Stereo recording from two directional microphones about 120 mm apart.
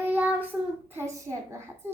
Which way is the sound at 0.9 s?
25° right (ahead or behind).